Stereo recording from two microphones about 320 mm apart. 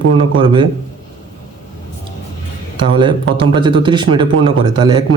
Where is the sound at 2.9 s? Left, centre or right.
Centre.